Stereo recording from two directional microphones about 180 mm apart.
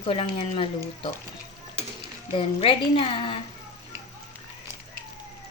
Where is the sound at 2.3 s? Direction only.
30° left (ahead or behind).